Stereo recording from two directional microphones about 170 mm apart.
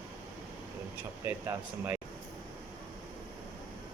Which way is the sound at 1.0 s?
10° right (ahead or behind).